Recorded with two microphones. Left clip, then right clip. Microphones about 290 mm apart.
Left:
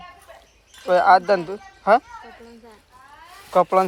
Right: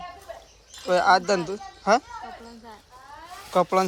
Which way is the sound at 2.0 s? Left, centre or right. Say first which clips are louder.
Right 2 dB; right.